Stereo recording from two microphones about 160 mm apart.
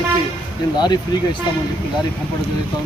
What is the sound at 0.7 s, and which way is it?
Speech, 25° left (ahead or behind).